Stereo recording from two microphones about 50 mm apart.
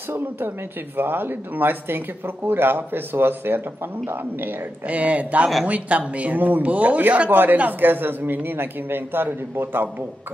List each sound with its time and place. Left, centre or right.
0.9 s speech: right
4.8 s speech: right